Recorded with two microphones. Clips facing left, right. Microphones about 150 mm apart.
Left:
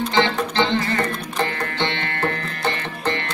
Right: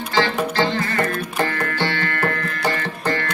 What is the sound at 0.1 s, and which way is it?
Music, 20° left (ahead or behind).